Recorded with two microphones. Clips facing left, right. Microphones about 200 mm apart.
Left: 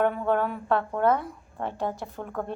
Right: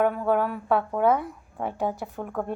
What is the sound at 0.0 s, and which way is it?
A woman's voice, 5° right (ahead or behind).